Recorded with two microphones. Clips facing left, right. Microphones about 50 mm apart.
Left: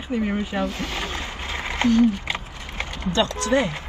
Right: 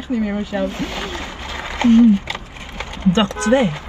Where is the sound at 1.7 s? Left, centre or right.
Right.